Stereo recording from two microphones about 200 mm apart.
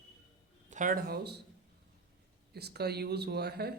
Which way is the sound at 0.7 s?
40° right (ahead or behind).